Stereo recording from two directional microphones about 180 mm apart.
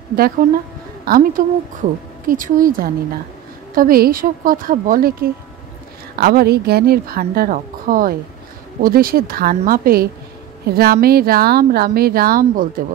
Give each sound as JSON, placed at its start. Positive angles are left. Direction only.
{"t": 0.1, "sound": "speech", "side_deg": -55}